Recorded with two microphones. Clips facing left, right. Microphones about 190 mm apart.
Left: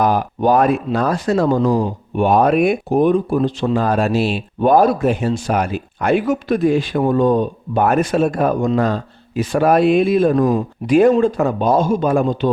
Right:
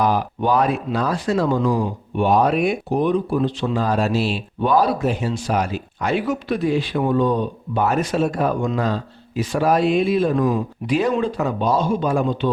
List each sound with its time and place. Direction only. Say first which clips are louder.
0.0 s speech: left 4 dB; 50° left (ahead or behind)